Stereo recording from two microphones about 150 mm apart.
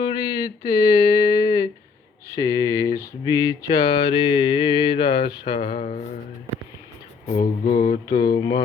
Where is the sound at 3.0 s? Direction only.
25° left (ahead or behind); by 6.0 s 45° left (ahead or behind).